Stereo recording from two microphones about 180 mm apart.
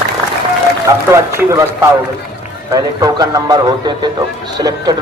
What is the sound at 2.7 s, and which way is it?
A man's voice, 20° right (ahead or behind).